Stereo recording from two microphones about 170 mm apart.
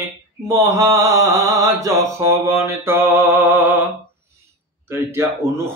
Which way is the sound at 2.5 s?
15° right (ahead or behind).